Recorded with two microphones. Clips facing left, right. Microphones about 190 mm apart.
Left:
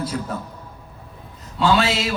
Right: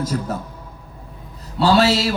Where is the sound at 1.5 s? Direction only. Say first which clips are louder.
Right 3 dB; 40° right (ahead or behind).